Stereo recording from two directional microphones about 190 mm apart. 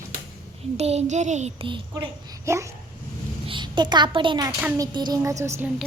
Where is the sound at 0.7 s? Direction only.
35° right (ahead or behind); by 5.7 s 15° right (ahead or behind).